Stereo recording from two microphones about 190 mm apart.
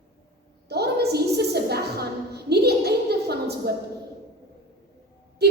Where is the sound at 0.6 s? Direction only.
60° right (ahead or behind).